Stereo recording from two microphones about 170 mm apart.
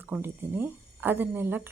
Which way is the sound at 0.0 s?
10° right (ahead or behind).